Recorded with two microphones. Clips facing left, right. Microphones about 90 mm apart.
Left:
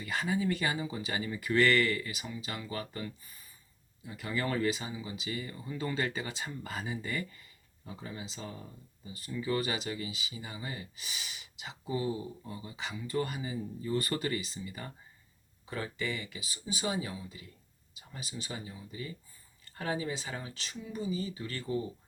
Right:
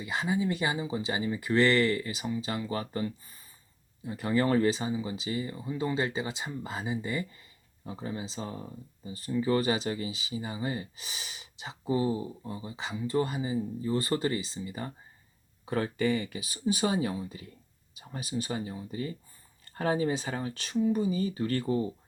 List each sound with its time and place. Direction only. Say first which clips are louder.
0.0 s speech: right 2 dB; 20° right (ahead or behind)
15.7 s speech: right 8 dB; 45° right (ahead or behind)